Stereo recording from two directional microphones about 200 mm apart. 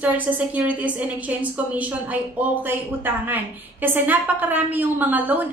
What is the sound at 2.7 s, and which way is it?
A woman's voice, 10° right (ahead or behind).